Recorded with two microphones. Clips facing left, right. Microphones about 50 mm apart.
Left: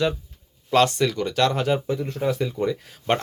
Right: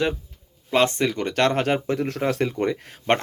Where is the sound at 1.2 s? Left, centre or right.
Right.